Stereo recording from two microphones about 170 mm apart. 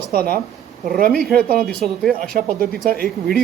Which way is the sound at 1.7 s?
5° left (ahead or behind).